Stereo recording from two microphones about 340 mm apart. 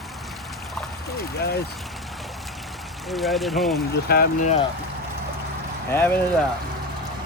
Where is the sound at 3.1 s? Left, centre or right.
Centre.